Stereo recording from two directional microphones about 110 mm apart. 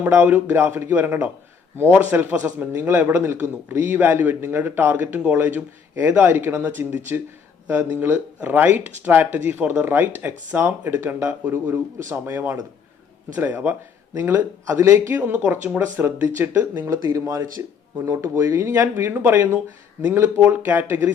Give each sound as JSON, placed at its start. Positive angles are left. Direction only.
{"t": 0.0, "sound": "a man's voice", "side_deg": -20}
{"t": 17.0, "sound": "a man's voice", "side_deg": -30}